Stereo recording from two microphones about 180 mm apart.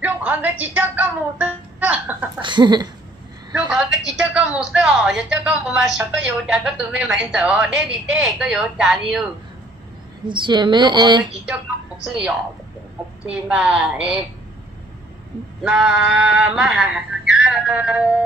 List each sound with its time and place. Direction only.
0.0 s music: 10° right (ahead or behind)
2.4 s a woman's voice: 25° right (ahead or behind)
3.5 s a woman's voice: 5° right (ahead or behind)
10.2 s a woman's voice: 25° right (ahead or behind)
13.3 s a woman's voice: 5° right (ahead or behind)
15.6 s a woman's voice: 5° right (ahead or behind)